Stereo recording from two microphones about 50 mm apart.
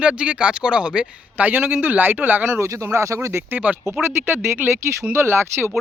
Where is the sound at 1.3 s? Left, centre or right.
Right.